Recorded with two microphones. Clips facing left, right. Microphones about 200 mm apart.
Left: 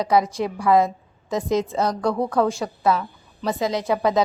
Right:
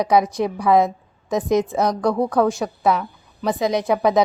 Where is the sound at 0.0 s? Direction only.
15° right (ahead or behind).